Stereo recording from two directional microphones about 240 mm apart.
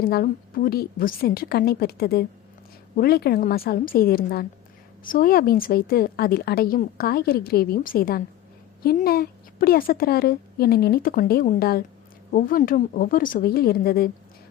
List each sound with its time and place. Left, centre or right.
0.0 s a woman's voice: left